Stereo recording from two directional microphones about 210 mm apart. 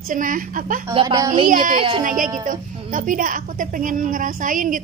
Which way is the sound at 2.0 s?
40° right (ahead or behind).